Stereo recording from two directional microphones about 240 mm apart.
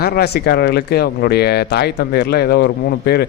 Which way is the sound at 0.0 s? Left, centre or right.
Left.